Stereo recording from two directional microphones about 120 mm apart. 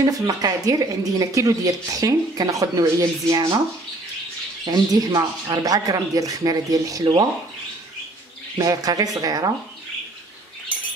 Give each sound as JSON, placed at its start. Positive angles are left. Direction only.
{"t": 0.0, "sound": "speech", "side_deg": -30}
{"t": 4.6, "sound": "speech", "side_deg": -35}
{"t": 8.5, "sound": "speech", "side_deg": -30}